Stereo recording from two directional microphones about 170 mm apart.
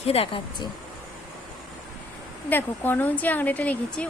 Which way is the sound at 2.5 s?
10° left (ahead or behind).